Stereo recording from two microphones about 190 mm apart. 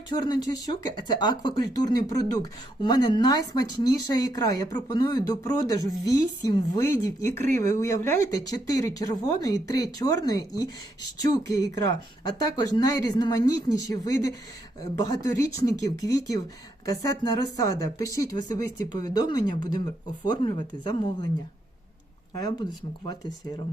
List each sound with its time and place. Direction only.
0.1 s speech: 20° left (ahead or behind)